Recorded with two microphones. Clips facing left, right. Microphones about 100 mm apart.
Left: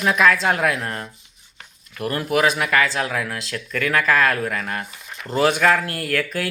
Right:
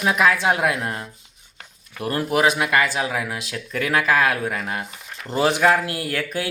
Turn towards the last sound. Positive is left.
turn(degrees=-25)  # may be behind; listen again after turning